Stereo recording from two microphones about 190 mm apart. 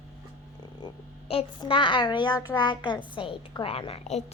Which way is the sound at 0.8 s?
25° left (ahead or behind).